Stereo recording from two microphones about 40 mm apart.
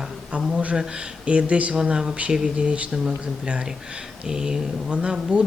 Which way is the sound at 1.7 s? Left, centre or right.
Centre.